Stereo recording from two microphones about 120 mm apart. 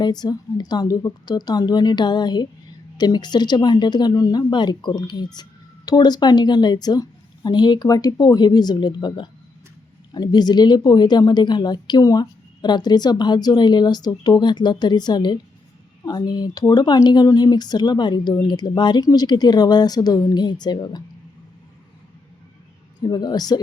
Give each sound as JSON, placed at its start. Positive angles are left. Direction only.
{"t": 0.0, "sound": "speech", "side_deg": 35}
{"t": 23.0, "sound": "speech", "side_deg": 35}